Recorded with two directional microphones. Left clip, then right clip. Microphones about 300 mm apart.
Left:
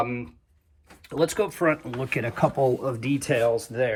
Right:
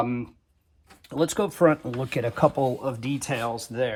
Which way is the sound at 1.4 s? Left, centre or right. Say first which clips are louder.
Right 4 dB; right.